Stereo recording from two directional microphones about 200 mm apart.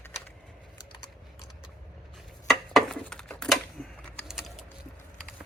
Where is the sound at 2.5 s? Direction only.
Centre (ahead or behind).